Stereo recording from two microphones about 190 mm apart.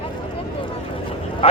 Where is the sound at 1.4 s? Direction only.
30° left (ahead or behind).